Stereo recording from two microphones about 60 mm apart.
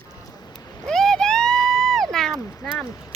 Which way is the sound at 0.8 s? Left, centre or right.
Centre.